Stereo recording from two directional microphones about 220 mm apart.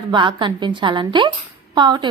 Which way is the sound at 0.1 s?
20° right (ahead or behind).